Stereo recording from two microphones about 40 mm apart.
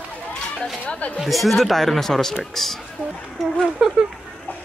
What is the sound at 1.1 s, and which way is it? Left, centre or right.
Speech, centre.